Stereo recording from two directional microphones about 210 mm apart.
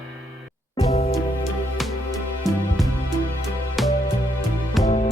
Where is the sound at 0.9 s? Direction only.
30° left (ahead or behind).